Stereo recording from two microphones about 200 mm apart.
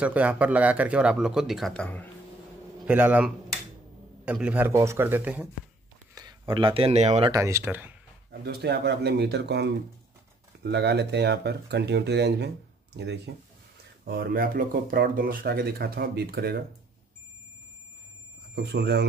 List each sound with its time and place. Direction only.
0.0 s speech: 5° right (ahead or behind)
2.8 s a man's voice: 10° right (ahead or behind)
6.1 s speech: 20° right (ahead or behind)
7.2 s a man's voice: 15° right (ahead or behind)
8.3 s speech: 55° right (ahead or behind)
14.0 s speech: 45° right (ahead or behind)
18.5 s speech: 55° right (ahead or behind)